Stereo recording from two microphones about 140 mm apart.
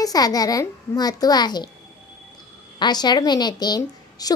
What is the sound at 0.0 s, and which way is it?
A child's voice, 25° left (ahead or behind).